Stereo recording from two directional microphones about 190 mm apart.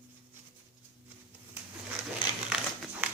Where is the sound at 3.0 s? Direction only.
10° right (ahead or behind).